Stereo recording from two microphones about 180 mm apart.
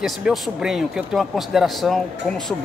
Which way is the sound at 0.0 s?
Centre (ahead or behind).